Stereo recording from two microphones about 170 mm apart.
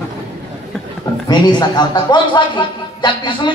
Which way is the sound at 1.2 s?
25° left (ahead or behind).